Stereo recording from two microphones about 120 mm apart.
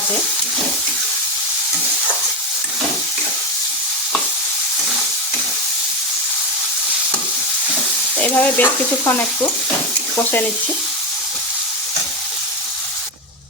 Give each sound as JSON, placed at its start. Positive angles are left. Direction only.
{"t": 8.2, "sound": "stir", "side_deg": 15}